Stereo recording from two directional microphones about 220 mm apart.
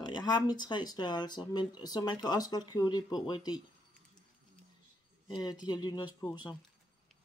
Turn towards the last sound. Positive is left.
turn(degrees=20)  # may be behind; listen again after turning